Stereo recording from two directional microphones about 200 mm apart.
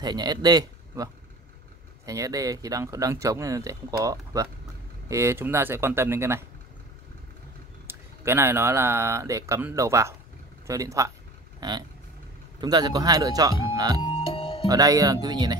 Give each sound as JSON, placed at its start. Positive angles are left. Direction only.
{"t": 0.0, "sound": "a man's voice", "side_deg": -20}
{"t": 7.8, "sound": "speech", "side_deg": -10}
{"t": 12.5, "sound": "speech", "side_deg": -20}
{"t": 13.7, "sound": "music", "side_deg": -20}
{"t": 14.0, "sound": "music", "side_deg": 30}
{"t": 14.7, "sound": "speech", "side_deg": -15}